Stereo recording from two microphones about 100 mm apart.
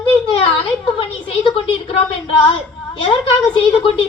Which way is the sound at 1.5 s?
60° left (ahead or behind).